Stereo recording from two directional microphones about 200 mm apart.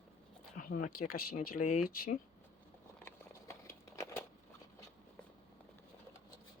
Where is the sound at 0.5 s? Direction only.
40° left (ahead or behind).